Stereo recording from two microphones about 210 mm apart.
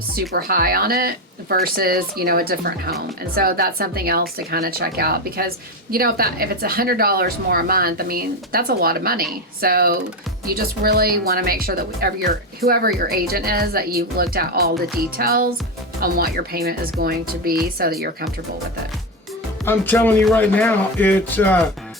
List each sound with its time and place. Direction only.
0.3 s speech: 45° right (ahead or behind)
19.6 s speech: 10° left (ahead or behind)